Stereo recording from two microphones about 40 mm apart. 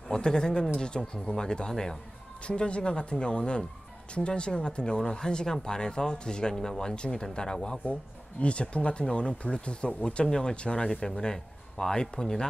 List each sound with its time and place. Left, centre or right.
0.1 s speech: centre
2.4 s speech: left
7.8 s speech: left